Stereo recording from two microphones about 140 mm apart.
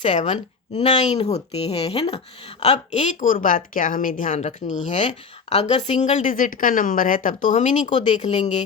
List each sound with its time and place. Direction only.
0.0 s speech: 60° left (ahead or behind)